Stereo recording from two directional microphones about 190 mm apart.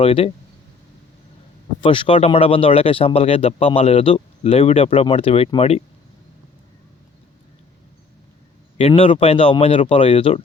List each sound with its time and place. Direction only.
0.0 s speech: 30° left (ahead or behind)
1.8 s speech: 25° left (ahead or behind)
8.8 s speech: 30° left (ahead or behind)